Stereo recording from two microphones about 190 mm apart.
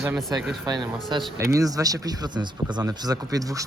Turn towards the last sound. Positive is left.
turn(degrees=-20)  # may be behind; listen again after turning